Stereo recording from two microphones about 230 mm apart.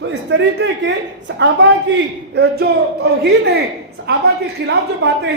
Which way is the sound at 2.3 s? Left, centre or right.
Right.